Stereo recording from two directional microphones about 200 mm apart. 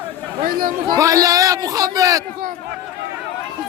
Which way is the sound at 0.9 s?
15° right (ahead or behind).